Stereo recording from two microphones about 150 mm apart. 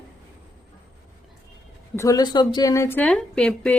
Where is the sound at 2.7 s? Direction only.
15° left (ahead or behind).